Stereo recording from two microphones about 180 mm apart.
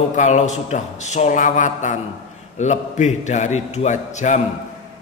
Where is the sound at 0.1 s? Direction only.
40° left (ahead or behind).